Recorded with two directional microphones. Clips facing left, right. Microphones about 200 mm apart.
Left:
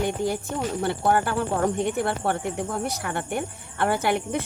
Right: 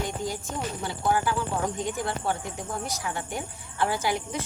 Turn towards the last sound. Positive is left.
turn(degrees=60)  # may be behind; listen again after turning